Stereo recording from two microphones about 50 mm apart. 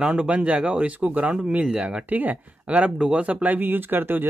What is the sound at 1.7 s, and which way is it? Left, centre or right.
Speech, right.